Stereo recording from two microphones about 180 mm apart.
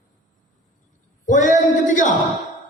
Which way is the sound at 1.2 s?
45° left (ahead or behind).